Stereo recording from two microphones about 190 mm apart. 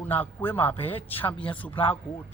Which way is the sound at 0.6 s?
10° left (ahead or behind).